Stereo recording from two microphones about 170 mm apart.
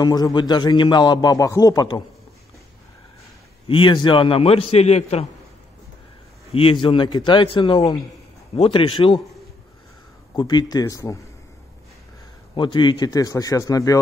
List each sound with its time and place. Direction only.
0.0 s a man's voice: 25° left (ahead or behind)
3.6 s a man's voice: 30° left (ahead or behind)
6.5 s a man's voice: 30° left (ahead or behind)
10.3 s a man's voice: 25° left (ahead or behind)
12.5 s a man's voice: 25° left (ahead or behind)